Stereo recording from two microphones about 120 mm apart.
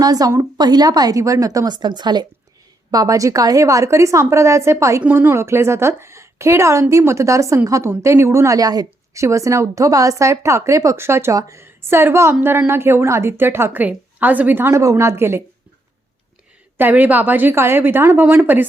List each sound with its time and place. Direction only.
0.0 s a woman's voice: 30° right (ahead or behind)
16.7 s a woman's voice: 15° right (ahead or behind)